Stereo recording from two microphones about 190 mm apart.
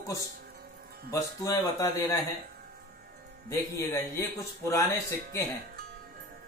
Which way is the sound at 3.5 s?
15° left (ahead or behind).